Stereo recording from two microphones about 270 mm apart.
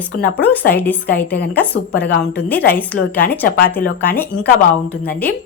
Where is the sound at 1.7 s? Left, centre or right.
Left.